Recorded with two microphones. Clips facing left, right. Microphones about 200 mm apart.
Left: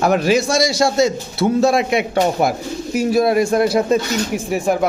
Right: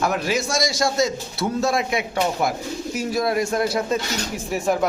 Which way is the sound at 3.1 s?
30° left (ahead or behind).